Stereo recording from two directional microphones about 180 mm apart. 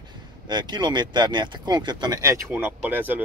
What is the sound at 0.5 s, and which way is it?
Speech, 25° right (ahead or behind).